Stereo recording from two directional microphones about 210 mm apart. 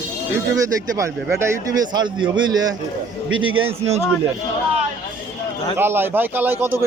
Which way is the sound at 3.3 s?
70° right (ahead or behind).